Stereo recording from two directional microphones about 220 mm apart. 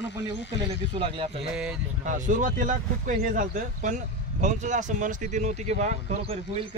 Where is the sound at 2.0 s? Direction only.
35° right (ahead or behind).